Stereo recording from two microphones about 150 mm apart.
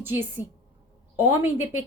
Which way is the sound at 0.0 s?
15° right (ahead or behind).